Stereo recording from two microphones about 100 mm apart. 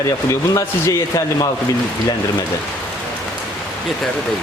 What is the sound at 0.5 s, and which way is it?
Speech, 35° left (ahead or behind).